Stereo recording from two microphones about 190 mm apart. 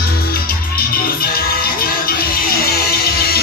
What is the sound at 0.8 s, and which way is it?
Music, 50° left (ahead or behind).